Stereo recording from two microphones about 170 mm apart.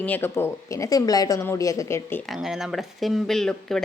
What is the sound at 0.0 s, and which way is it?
A woman's voice, 10° left (ahead or behind).